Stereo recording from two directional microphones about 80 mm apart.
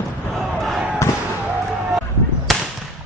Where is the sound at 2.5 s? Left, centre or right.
Centre.